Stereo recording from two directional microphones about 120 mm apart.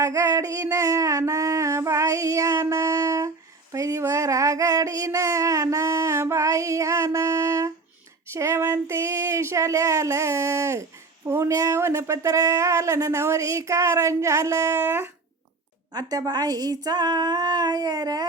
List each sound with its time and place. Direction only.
0.0 s a sound: 25° right (ahead or behind)
8.3 s speech: 20° right (ahead or behind)
15.9 s speech: 35° right (ahead or behind)